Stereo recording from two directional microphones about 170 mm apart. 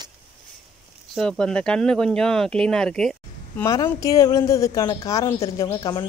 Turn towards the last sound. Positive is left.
turn(degrees=20)  # may be behind; listen again after turning